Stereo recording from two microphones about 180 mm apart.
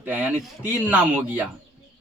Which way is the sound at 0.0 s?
10° right (ahead or behind).